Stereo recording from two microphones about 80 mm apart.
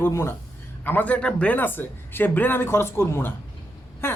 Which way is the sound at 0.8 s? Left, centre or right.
Left.